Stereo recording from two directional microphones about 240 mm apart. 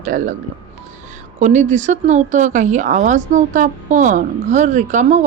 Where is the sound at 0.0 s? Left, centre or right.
Right.